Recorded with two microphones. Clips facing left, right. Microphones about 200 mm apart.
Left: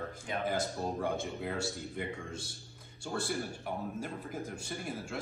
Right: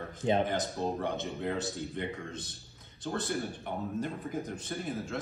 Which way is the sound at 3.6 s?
5° left (ahead or behind).